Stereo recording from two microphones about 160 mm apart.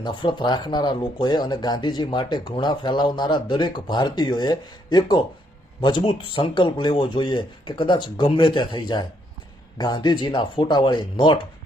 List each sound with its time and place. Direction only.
0.0 s speech: 30° left (ahead or behind)